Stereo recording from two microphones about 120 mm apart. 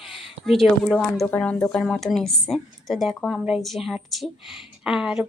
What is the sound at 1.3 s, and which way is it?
Speech, 10° left (ahead or behind).